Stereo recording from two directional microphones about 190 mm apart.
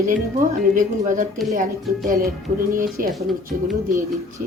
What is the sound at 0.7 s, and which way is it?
Speech, 45° right (ahead or behind).